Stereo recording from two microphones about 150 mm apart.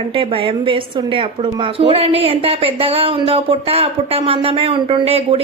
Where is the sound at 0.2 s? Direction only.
35° right (ahead or behind).